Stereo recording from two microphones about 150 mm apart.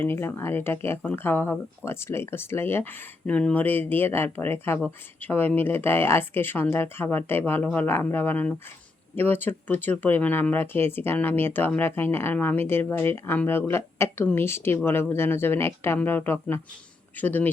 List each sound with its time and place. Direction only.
0.0 s speech: 15° left (ahead or behind)